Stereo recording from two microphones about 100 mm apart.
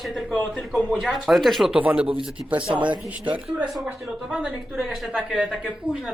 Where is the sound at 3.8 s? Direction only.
10° right (ahead or behind).